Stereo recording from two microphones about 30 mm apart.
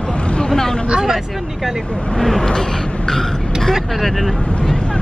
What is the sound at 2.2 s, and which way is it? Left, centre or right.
Speech, centre.